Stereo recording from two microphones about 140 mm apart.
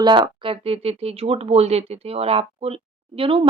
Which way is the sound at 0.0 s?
35° right (ahead or behind).